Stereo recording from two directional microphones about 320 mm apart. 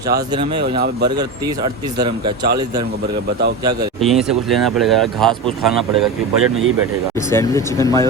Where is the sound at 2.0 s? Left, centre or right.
Centre.